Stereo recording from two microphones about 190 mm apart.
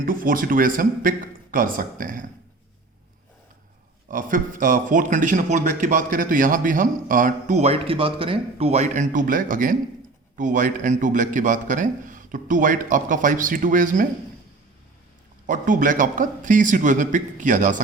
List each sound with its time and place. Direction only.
0.0 s speech: 45° right (ahead or behind)
4.1 s speech: 45° right (ahead or behind)
15.4 s speech: 45° right (ahead or behind)